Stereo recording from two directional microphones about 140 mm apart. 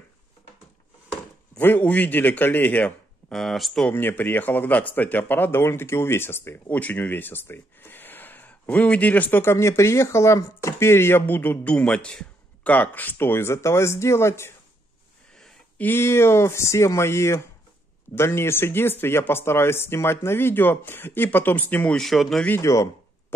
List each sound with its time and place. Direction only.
1.5 s speech: 15° left (ahead or behind)
3.9 s speech: 15° left (ahead or behind)
15.3 s a sound: 5° left (ahead or behind)
15.9 s speech: 15° left (ahead or behind); by 22.5 s centre (ahead or behind)
22.5 s speech: 20° left (ahead or behind)